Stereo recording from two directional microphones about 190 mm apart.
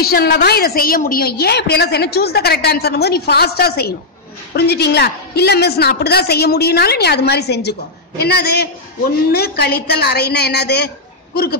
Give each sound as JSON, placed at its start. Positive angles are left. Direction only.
{"t": 0.0, "sound": "a woman's voice", "side_deg": 55}